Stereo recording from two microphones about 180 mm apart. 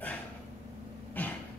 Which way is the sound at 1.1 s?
10° left (ahead or behind).